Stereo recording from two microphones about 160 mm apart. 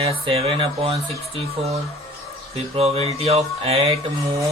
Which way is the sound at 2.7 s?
40° right (ahead or behind).